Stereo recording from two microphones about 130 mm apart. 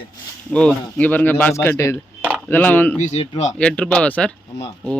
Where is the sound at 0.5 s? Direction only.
5° left (ahead or behind).